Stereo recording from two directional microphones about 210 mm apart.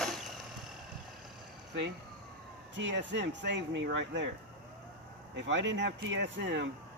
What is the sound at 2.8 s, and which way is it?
A man's voice, 60° right (ahead or behind).